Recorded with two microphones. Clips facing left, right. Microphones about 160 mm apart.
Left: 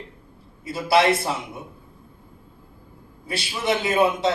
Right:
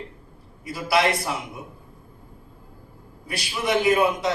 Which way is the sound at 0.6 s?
25° left (ahead or behind).